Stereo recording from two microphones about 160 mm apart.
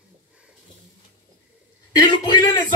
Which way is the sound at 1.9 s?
25° left (ahead or behind).